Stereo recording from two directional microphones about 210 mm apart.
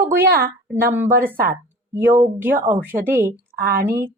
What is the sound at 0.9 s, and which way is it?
Speech, 10° right (ahead or behind).